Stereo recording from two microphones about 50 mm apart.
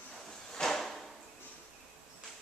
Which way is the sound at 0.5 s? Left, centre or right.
Centre.